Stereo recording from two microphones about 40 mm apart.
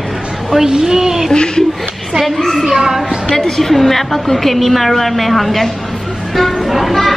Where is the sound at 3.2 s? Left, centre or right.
Centre.